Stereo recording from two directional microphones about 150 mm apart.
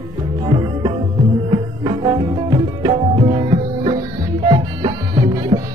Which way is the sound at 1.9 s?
30° right (ahead or behind).